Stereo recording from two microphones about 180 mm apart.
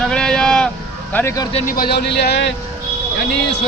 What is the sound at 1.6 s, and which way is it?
Speech, 55° left (ahead or behind).